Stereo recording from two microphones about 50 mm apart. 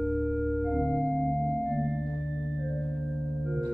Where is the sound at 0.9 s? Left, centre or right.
Centre.